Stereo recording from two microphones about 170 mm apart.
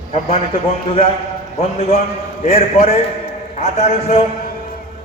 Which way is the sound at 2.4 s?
40° left (ahead or behind).